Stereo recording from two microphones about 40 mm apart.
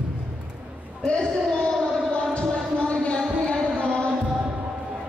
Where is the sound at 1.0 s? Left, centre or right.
Left.